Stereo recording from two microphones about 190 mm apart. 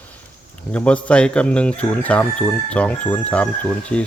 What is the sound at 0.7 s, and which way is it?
Speech, 5° left (ahead or behind).